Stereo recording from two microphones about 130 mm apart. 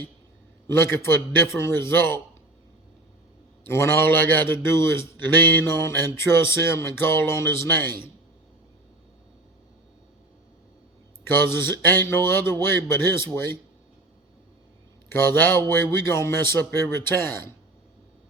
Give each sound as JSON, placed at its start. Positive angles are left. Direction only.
{"t": 0.7, "sound": "speech", "side_deg": 20}
{"t": 3.7, "sound": "speech", "side_deg": 20}
{"t": 11.2, "sound": "speech", "side_deg": 15}
{"t": 15.1, "sound": "speech", "side_deg": 15}